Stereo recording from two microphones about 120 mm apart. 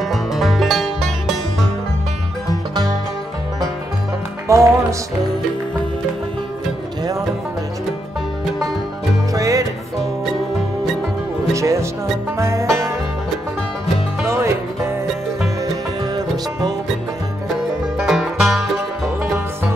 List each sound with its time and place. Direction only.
0.1 s music: centre (ahead or behind)
4.5 s music: 25° right (ahead or behind)
9.3 s music: 25° right (ahead or behind)
11.5 s music: 25° right (ahead or behind)
14.2 s music: 25° right (ahead or behind)
17.9 s music: centre (ahead or behind)